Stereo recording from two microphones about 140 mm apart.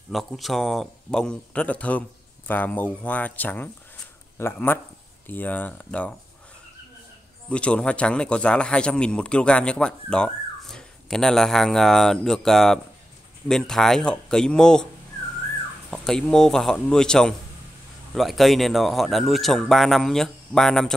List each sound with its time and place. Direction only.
0.1 s a man's voice: centre (ahead or behind)
7.4 s a man's voice: 10° left (ahead or behind)
15.9 s speech: 5° left (ahead or behind)